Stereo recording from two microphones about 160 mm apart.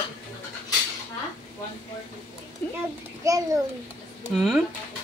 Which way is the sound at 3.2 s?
20° right (ahead or behind).